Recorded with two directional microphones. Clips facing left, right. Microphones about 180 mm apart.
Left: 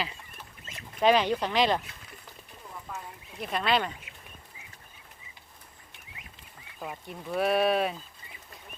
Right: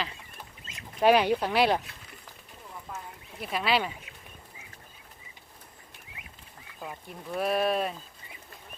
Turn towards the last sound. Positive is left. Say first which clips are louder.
# left 2 dB
turn(degrees=0)  # may be behind; listen again after turning